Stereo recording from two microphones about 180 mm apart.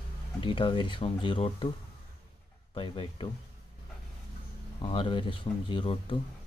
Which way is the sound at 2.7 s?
30° left (ahead or behind).